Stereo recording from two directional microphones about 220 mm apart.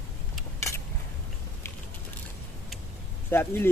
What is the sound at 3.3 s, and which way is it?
Speech, 10° left (ahead or behind).